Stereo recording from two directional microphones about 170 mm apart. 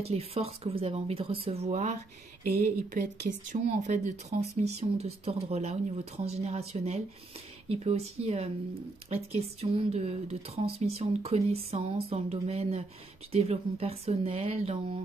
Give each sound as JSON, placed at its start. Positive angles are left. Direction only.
{"t": 0.0, "sound": "speech", "side_deg": -35}